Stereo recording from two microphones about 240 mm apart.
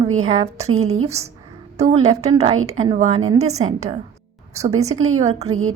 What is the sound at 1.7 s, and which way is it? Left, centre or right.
Speech, right.